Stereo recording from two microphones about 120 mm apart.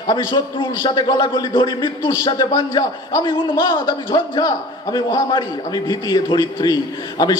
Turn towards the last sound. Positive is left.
turn(degrees=35)  # may be behind; listen again after turning